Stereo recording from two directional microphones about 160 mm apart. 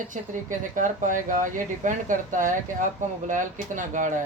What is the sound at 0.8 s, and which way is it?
Speech, 55° right (ahead or behind).